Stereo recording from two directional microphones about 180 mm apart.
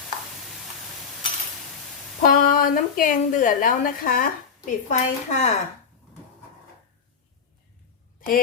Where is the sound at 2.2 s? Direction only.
50° left (ahead or behind).